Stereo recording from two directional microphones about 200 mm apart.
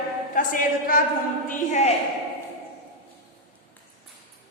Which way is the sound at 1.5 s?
35° left (ahead or behind).